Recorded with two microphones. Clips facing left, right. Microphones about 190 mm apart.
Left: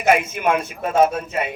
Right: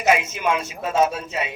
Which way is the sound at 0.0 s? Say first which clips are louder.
Left 2 dB; 55° left (ahead or behind).